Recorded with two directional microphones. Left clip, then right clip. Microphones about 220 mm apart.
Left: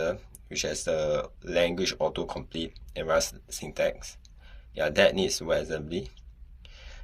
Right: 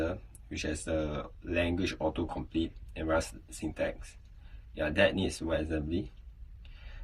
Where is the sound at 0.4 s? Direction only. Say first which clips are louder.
Left 7 dB; 40° left (ahead or behind).